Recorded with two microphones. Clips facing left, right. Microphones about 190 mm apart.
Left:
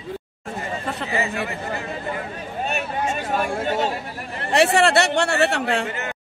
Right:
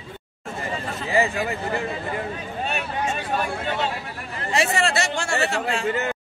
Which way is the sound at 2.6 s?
45° left (ahead or behind).